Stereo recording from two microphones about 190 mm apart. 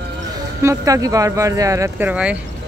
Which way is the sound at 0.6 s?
15° right (ahead or behind).